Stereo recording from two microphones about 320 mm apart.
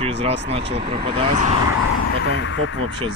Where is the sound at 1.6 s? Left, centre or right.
Left.